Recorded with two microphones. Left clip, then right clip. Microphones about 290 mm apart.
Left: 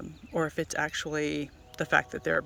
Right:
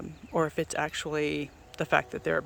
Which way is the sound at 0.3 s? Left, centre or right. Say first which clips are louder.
Right 1 dB; centre.